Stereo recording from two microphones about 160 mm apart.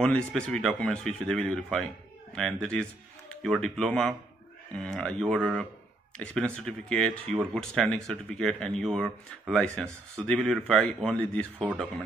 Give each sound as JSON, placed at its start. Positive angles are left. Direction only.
{"t": 0.0, "sound": "speech", "side_deg": 5}